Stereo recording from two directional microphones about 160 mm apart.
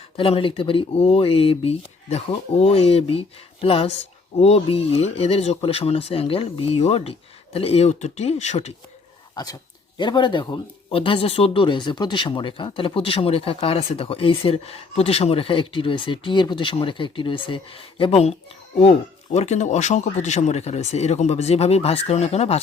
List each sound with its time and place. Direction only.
0.2 s speech: 35° left (ahead or behind)
9.3 s speech: 25° left (ahead or behind); by 22.6 s 40° left (ahead or behind)